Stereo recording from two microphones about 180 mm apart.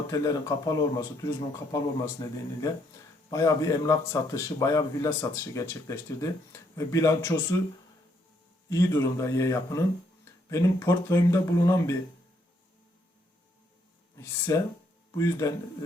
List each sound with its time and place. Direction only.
0.1 s speech: 20° left (ahead or behind)
8.7 s speech: 15° left (ahead or behind)
14.2 s a man's voice: 15° left (ahead or behind)